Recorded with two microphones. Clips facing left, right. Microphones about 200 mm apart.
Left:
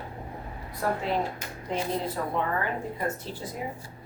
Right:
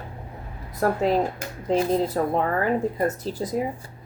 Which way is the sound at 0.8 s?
40° right (ahead or behind).